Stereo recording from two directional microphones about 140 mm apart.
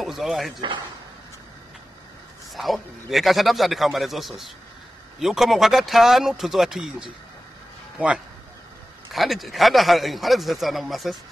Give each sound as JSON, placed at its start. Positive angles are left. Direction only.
{"t": 0.0, "sound": "a man's voice", "side_deg": 0}
{"t": 2.5, "sound": "a man's voice", "side_deg": 0}
{"t": 9.1, "sound": "a man's voice", "side_deg": 0}